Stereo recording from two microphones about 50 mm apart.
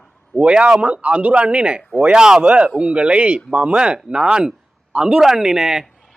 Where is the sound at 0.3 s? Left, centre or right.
Right.